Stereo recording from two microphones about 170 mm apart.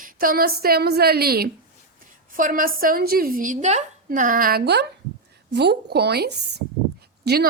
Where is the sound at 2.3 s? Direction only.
50° right (ahead or behind).